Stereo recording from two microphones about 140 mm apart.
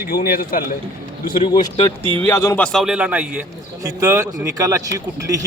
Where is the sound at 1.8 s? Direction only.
25° left (ahead or behind).